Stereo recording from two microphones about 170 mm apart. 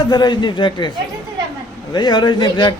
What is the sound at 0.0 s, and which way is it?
Speech, 25° left (ahead or behind).